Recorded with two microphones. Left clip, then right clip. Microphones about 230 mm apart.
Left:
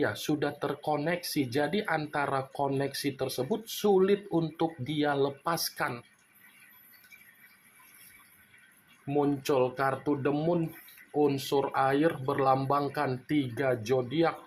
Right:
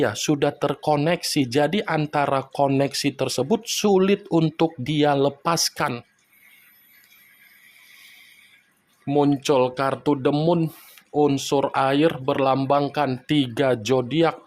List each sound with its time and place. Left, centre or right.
0.0 s speech: right
9.0 s speech: right